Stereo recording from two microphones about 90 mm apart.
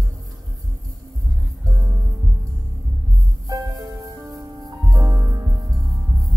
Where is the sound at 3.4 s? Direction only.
45° right (ahead or behind).